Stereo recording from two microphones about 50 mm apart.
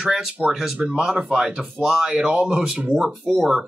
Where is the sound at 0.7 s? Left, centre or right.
Right.